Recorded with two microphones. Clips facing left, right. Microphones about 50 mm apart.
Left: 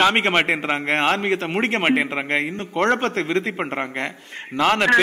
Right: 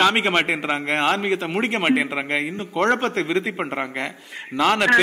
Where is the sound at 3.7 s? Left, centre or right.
Centre.